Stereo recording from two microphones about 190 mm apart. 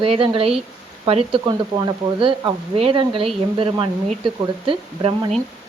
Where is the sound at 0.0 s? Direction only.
30° right (ahead or behind).